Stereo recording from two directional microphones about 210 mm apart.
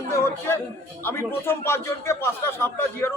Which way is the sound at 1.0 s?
10° left (ahead or behind).